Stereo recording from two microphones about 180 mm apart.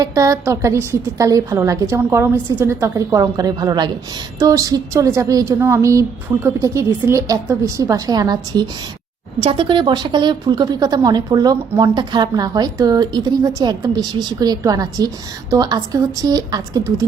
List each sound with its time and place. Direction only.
0.0 s a woman's voice: 20° right (ahead or behind)